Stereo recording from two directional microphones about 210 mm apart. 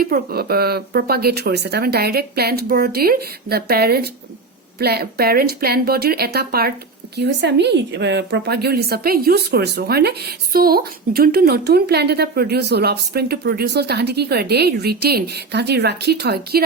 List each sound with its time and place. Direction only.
0.0 s a woman's voice: 45° right (ahead or behind)